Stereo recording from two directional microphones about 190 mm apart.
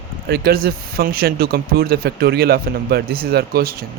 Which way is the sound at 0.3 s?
55° right (ahead or behind).